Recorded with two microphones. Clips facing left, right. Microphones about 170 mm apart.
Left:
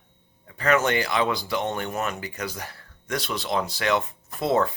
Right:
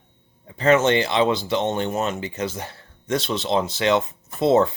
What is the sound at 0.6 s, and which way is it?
Speech, 25° right (ahead or behind).